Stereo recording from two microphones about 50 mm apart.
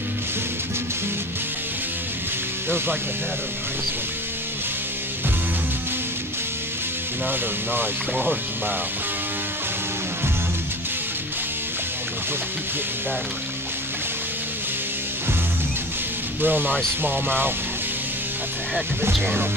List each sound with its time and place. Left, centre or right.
7.2 s speech: right
16.3 s speech: right